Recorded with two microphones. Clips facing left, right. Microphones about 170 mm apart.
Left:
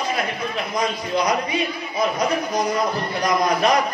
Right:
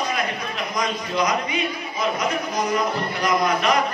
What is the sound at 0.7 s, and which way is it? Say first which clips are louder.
A man's voice: left 1 dB; 30° left (ahead or behind).